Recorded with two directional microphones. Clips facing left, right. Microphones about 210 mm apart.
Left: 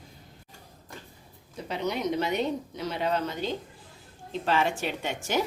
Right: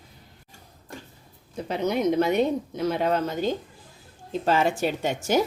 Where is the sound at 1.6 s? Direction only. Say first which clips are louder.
Right 5 dB; 50° right (ahead or behind).